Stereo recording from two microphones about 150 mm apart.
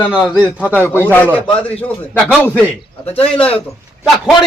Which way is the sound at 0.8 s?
15° left (ahead or behind).